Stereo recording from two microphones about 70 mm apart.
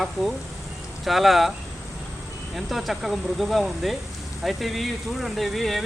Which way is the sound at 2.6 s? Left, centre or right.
Centre.